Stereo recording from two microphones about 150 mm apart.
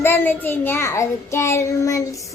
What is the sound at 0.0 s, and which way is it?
Child singing, 15° left (ahead or behind).